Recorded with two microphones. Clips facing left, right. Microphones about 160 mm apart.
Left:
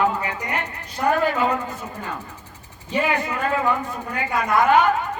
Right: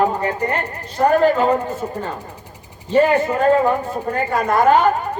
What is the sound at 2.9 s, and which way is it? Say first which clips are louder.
Speech: right 8 dB; 40° right (ahead or behind).